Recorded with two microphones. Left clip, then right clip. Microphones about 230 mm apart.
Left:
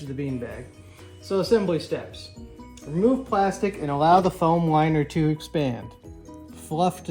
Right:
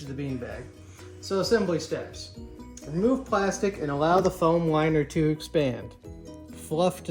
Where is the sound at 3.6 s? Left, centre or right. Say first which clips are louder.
Left 2 dB; centre.